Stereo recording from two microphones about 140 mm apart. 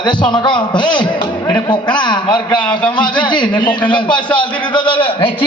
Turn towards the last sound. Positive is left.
turn(degrees=35)  # may be behind; listen again after turning